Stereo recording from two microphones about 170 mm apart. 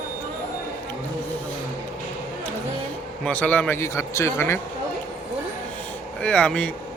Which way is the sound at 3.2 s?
10° left (ahead or behind).